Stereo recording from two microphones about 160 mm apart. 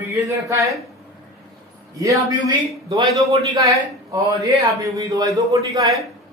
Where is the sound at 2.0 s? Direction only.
20° right (ahead or behind).